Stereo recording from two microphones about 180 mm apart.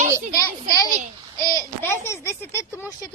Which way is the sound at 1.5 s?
15° left (ahead or behind).